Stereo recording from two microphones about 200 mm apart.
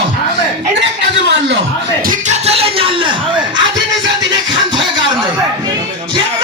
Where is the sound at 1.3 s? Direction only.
60° right (ahead or behind).